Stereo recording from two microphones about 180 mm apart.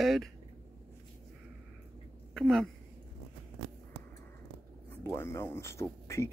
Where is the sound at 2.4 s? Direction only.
Centre (ahead or behind).